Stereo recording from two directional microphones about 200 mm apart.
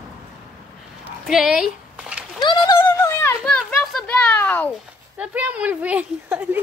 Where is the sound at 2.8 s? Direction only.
10° left (ahead or behind).